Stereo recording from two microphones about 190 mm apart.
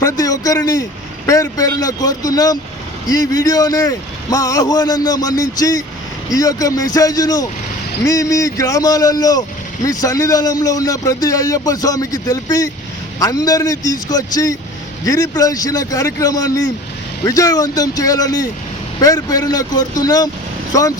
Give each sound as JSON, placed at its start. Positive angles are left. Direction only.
{"t": 0.0, "sound": "a man's voice", "side_deg": 20}